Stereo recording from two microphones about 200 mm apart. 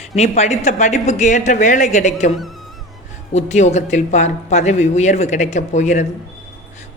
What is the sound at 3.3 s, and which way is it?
Speech, 35° left (ahead or behind).